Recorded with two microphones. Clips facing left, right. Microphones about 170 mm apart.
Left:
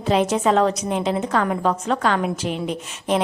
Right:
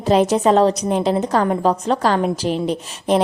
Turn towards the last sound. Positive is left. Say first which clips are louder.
# right 4 dB
turn(degrees=-35)  # may be behind; listen again after turning